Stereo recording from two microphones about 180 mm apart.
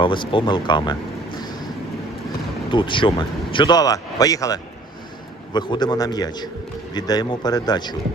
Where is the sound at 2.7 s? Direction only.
25° left (ahead or behind).